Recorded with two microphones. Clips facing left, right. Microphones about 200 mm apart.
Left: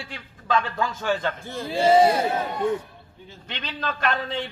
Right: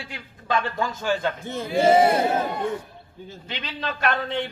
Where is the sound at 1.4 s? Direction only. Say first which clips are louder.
Right 2 dB; 20° right (ahead or behind).